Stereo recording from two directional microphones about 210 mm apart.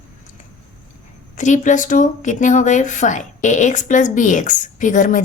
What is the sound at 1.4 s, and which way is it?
Speech, 35° left (ahead or behind).